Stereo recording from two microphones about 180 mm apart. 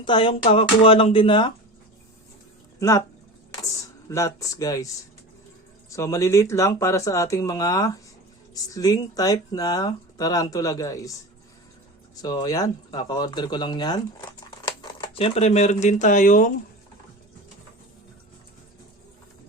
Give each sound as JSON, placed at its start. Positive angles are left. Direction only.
{"t": 0.0, "sound": "speech", "side_deg": 25}
{"t": 4.1, "sound": "speech", "side_deg": 15}
{"t": 5.9, "sound": "speech", "side_deg": 15}
{"t": 12.2, "sound": "speech", "side_deg": 20}